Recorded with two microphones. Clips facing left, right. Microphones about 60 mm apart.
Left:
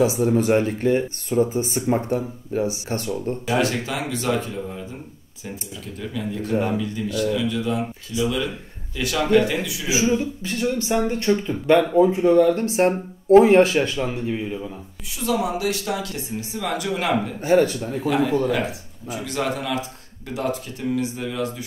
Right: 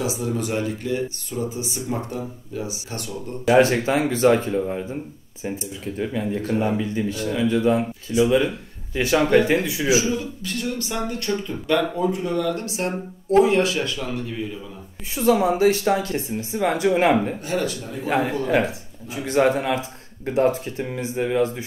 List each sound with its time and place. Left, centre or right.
0.0 s speech: left
3.4 s speech: right
5.9 s speech: right
10.0 s speech: left
15.1 s speech: right
17.4 s speech: left
18.0 s speech: right